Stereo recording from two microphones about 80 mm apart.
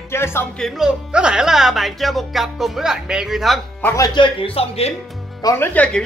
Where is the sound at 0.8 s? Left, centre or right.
Centre.